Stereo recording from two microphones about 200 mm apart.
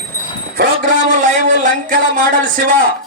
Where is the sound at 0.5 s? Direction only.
45° right (ahead or behind).